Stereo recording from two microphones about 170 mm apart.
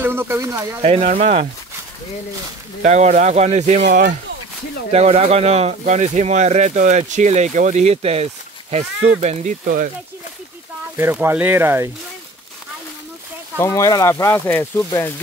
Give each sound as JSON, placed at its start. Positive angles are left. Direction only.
{"t": 0.0, "sound": "speech", "side_deg": -15}
{"t": 0.8, "sound": "speech", "side_deg": -40}
{"t": 2.8, "sound": "speech", "side_deg": -40}
{"t": 4.9, "sound": "speech", "side_deg": -35}
{"t": 11.0, "sound": "speech", "side_deg": -15}
{"t": 13.6, "sound": "speech", "side_deg": 20}